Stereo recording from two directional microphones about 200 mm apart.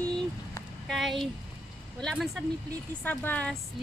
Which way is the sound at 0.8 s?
Centre (ahead or behind).